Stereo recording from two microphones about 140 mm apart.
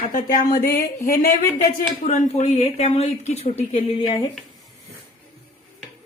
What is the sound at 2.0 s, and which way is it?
A woman's voice, 55° left (ahead or behind).